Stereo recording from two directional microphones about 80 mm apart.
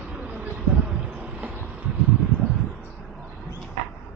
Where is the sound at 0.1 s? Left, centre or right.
Centre.